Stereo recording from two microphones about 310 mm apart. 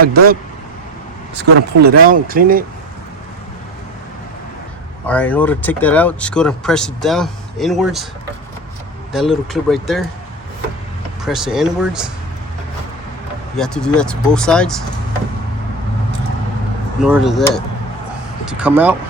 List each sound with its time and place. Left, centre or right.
0.0 s speech: right
1.4 s speech: right
5.0 s speech: centre
9.1 s speech: centre
11.3 s speech: centre
13.6 s speech: centre
17.0 s speech: centre